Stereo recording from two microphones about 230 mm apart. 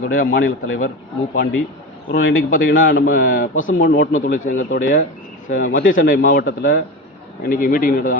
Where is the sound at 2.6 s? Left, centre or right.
Left.